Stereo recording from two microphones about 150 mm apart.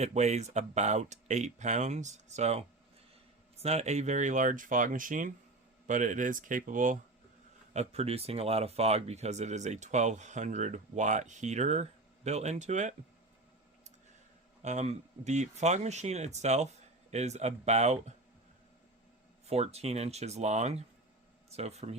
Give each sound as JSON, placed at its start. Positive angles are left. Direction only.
{"t": 0.0, "sound": "speech", "side_deg": -50}
{"t": 7.7, "sound": "speech", "side_deg": -45}
{"t": 14.6, "sound": "speech", "side_deg": -50}
{"t": 19.5, "sound": "speech", "side_deg": -45}